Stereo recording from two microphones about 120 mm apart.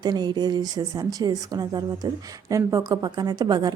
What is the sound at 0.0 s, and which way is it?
A woman's voice, 35° right (ahead or behind).